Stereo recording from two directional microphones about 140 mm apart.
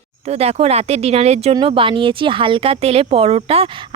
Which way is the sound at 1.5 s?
35° right (ahead or behind).